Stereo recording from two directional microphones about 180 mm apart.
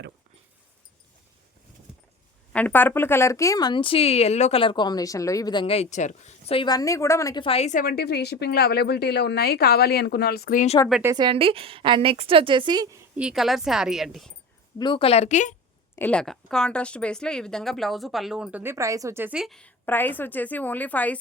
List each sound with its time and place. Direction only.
2.5 s speech: 10° left (ahead or behind)
7.4 s a woman's voice: 35° left (ahead or behind)
11.0 s a woman's voice: 20° right (ahead or behind)
13.1 s speech: 5° right (ahead or behind)
14.8 s a woman's voice: 30° left (ahead or behind)
16.0 s speech: 5° left (ahead or behind)